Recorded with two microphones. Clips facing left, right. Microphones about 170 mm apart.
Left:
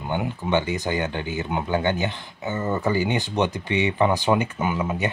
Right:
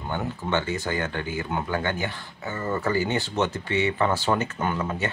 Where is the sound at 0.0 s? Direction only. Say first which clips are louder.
Left 3 dB; 15° left (ahead or behind).